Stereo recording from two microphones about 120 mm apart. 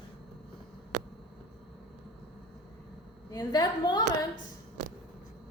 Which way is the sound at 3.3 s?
35° left (ahead or behind).